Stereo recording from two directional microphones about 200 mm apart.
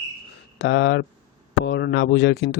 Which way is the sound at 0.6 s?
60° left (ahead or behind).